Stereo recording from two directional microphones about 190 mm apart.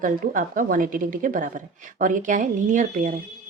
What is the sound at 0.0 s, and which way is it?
A woman's voice, 45° right (ahead or behind).